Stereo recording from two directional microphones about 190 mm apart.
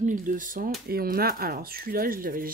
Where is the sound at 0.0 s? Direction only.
45° right (ahead or behind).